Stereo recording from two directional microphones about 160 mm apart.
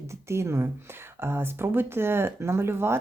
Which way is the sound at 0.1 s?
15° right (ahead or behind).